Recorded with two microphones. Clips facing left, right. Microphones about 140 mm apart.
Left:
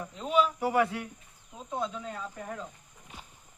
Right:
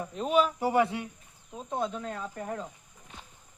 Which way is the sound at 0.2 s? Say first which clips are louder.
Right 1 dB; 50° right (ahead or behind).